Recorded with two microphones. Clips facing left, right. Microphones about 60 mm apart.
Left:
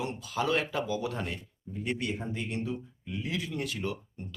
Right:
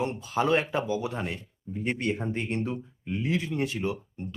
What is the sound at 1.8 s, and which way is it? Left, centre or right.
Speech, right.